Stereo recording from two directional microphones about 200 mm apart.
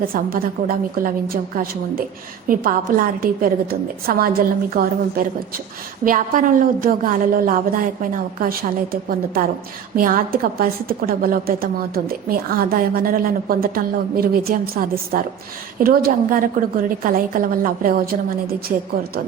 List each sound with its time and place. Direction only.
0.0 s a woman's voice: 45° right (ahead or behind)